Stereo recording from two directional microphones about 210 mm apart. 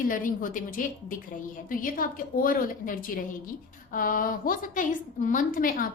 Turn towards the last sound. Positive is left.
turn(degrees=40)  # may be behind; listen again after turning